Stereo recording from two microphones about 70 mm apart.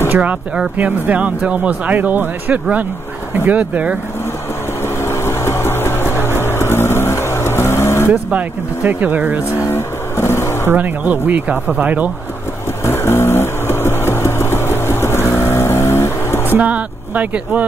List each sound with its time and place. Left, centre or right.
0.1 s speech: centre
4.8 s a sound: left
8.1 s speech: right
9.4 s vehicle: left
10.7 s speech: right
12.8 s vehicle: left
16.5 s speech: right